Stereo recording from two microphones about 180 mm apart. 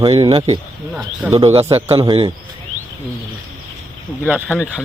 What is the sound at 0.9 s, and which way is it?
Speech, 5° right (ahead or behind).